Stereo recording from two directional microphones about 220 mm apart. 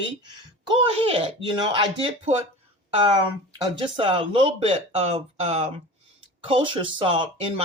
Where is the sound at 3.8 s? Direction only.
25° right (ahead or behind).